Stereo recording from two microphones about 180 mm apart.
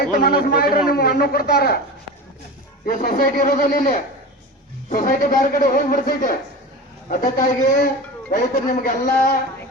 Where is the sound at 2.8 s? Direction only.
50° left (ahead or behind).